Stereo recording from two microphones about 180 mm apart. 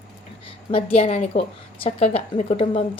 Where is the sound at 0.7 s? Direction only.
35° left (ahead or behind).